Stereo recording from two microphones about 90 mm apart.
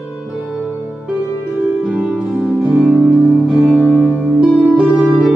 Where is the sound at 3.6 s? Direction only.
10° left (ahead or behind).